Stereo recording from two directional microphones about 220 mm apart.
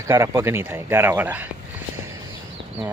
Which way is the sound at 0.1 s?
15° right (ahead or behind).